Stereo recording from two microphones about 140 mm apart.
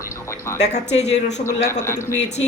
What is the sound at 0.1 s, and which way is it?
Music, 20° left (ahead or behind).